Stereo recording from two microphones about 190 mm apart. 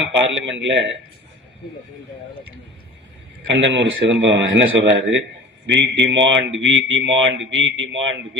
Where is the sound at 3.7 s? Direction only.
80° right.